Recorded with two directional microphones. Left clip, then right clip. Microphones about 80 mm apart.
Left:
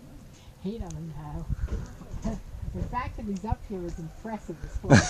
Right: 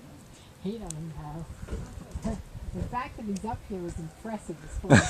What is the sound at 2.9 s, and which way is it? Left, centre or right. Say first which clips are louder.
Speech: left 1 dB; centre.